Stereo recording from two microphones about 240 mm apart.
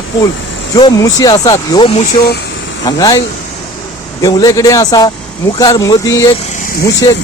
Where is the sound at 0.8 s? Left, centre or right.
Centre.